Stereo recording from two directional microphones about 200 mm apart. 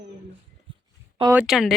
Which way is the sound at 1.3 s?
5° right (ahead or behind).